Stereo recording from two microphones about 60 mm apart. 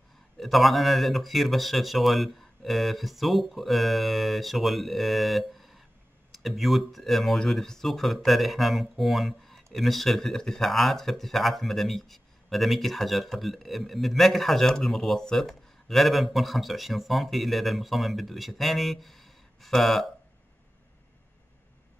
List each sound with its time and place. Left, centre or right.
0.4 s speech: centre